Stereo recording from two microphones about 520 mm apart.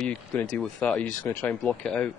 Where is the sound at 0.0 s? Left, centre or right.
Centre.